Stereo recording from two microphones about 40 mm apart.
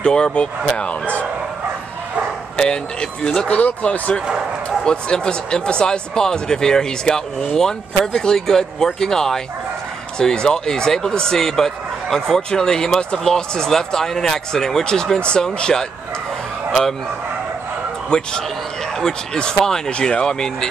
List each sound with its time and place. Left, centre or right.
0.0 s speech: left
2.5 s speech: centre
3.4 s speech: left
4.6 s speech: left
18.1 s speech: centre